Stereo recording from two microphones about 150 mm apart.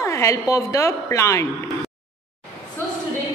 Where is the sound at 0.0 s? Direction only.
20° left (ahead or behind).